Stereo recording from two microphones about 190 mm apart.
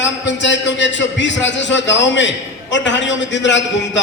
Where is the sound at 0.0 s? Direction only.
70° left (ahead or behind).